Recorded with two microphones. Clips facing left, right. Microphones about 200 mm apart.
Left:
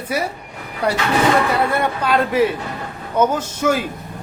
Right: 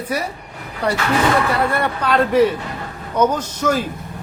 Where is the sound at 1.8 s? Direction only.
10° left (ahead or behind).